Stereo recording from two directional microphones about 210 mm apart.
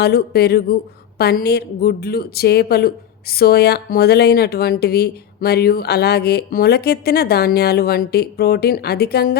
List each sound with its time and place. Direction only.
0.0 s a woman's voice: 50° left (ahead or behind)